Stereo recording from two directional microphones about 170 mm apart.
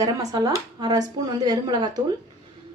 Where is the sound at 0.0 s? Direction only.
20° right (ahead or behind).